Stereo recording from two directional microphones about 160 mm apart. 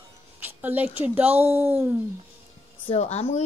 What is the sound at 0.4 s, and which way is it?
Speech, 10° right (ahead or behind).